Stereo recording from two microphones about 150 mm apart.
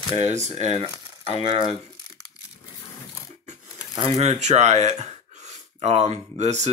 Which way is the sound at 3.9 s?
40° right (ahead or behind).